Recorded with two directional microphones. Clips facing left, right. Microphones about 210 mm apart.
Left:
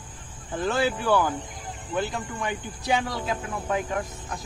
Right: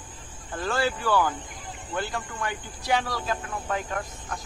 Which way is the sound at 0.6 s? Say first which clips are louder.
Left 2 dB; 20° left (ahead or behind).